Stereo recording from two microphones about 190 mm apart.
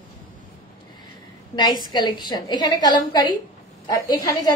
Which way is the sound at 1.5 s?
25° left (ahead or behind).